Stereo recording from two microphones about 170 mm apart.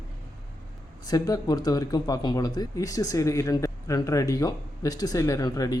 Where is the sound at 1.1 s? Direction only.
20° left (ahead or behind).